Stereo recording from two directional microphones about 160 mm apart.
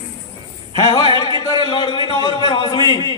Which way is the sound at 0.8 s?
25° left (ahead or behind).